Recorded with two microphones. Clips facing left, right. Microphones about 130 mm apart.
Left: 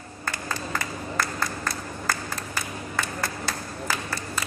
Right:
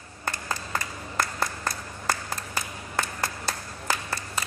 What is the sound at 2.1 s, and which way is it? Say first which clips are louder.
Applause: right 1 dB; 20° right (ahead or behind).